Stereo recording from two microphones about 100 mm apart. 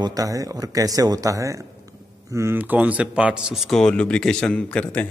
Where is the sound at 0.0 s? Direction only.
35° right (ahead or behind).